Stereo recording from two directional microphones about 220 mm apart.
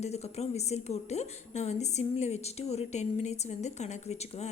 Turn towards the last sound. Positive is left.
turn(degrees=30)  # may be behind; listen again after turning